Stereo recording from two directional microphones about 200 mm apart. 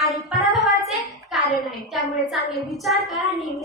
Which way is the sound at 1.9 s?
Centre (ahead or behind).